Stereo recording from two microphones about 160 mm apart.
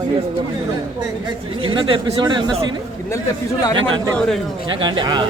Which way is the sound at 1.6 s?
30° right (ahead or behind).